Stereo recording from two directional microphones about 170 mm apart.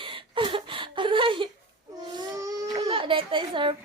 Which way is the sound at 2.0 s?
25° right (ahead or behind).